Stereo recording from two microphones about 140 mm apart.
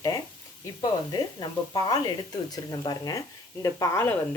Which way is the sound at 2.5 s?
30° left (ahead or behind).